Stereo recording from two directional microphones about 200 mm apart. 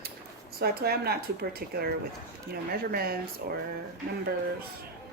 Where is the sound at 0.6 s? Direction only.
50° right (ahead or behind).